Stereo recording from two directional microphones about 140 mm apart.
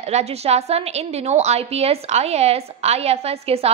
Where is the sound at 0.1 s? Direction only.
50° right (ahead or behind).